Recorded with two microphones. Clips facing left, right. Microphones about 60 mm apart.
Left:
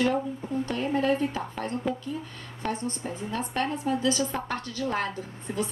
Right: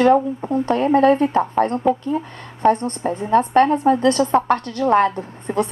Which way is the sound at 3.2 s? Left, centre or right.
Right.